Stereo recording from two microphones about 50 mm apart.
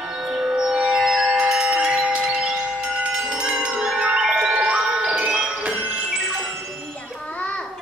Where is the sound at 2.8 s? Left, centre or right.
Right.